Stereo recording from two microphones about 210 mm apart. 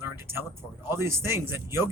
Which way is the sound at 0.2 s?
10° right (ahead or behind).